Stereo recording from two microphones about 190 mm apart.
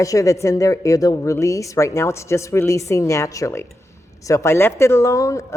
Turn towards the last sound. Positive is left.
turn(degrees=15)  # may be behind; listen again after turning